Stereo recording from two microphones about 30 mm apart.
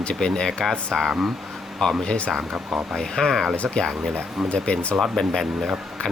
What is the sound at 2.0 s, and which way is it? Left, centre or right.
Speech, left.